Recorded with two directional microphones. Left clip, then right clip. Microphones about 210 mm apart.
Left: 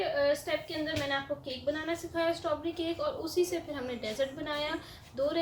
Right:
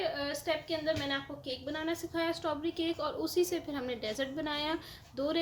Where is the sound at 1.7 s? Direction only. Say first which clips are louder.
Left 1 dB; 50° right (ahead or behind).